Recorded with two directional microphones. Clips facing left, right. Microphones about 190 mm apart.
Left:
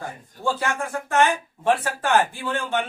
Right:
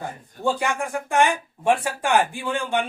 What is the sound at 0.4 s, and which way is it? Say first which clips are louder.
Speech: right 2 dB; 15° right (ahead or behind).